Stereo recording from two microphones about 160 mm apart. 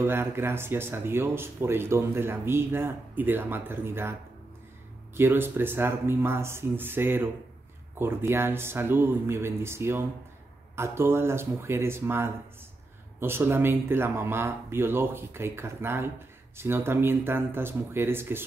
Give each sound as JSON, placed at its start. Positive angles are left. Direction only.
{"t": 0.0, "sound": "speech", "side_deg": -15}
{"t": 5.1, "sound": "speech", "side_deg": -15}